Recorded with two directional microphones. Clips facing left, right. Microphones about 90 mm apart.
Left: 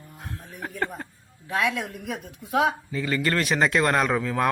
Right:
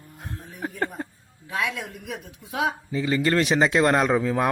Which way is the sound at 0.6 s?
20° right (ahead or behind).